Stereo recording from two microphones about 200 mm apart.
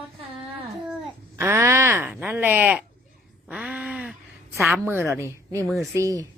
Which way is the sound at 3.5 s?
5° right (ahead or behind).